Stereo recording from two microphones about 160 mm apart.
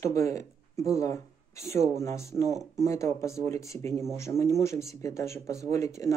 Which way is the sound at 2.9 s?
20° left (ahead or behind).